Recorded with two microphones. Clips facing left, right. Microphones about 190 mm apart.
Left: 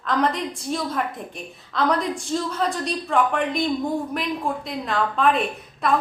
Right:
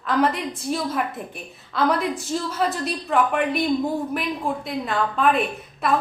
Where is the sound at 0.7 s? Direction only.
5° right (ahead or behind).